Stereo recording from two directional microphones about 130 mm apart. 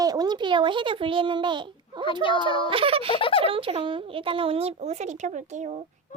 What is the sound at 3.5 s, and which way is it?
Speech, 40° right (ahead or behind).